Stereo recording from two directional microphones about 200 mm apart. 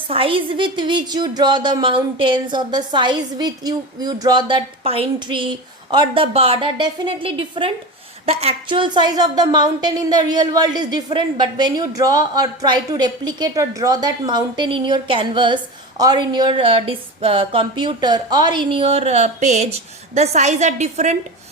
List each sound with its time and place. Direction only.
0.1 s a woman's voice: 25° right (ahead or behind)